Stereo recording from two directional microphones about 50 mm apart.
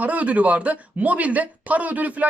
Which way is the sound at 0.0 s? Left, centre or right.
Right.